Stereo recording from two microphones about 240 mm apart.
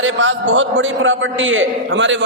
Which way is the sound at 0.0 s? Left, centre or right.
Right.